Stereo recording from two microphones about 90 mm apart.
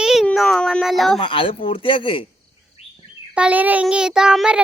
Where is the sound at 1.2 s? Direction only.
75° left (ahead or behind).